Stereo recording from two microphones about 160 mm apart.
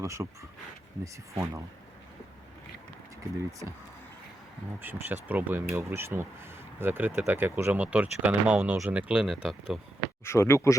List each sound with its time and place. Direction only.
0.0 s speech: 20° right (ahead or behind)
4.8 s speech: 10° right (ahead or behind)
10.2 s speech: 15° left (ahead or behind)